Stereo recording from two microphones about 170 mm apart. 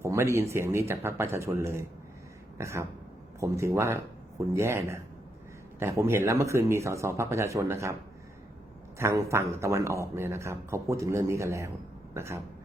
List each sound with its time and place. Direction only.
0.0 s speech: 15° right (ahead or behind)
9.0 s speech: 15° right (ahead or behind)